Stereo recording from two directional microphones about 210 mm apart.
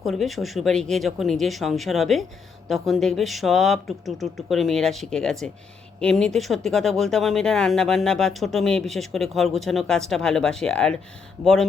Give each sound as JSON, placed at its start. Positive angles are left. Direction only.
{"t": 0.0, "sound": "speech", "side_deg": 0}